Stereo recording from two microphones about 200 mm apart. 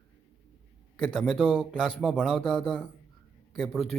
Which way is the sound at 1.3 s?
5° right (ahead or behind).